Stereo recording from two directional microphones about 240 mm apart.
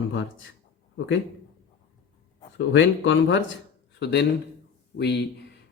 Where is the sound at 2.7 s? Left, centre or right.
Left.